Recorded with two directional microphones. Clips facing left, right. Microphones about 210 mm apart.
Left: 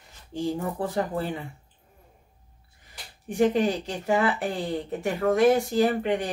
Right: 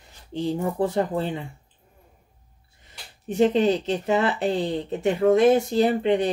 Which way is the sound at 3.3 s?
25° right (ahead or behind).